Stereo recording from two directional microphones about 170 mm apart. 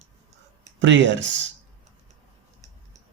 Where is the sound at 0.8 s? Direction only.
90° right.